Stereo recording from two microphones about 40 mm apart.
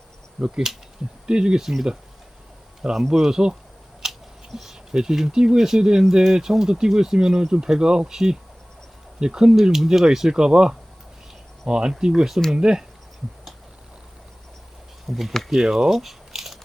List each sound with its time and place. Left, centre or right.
0.4 s speech: centre
1.3 s speech: right
2.9 s speech: centre
4.0 s scissors: centre
4.5 s speech: centre
15.0 s speech: centre